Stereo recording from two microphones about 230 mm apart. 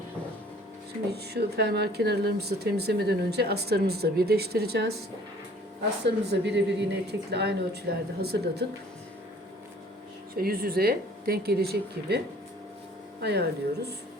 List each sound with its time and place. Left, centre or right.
1.1 s speech: right
6.1 s speech: right
10.3 s speech: right
13.2 s speech: right